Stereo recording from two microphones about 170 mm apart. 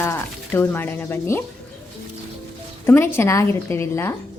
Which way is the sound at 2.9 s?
15° left (ahead or behind).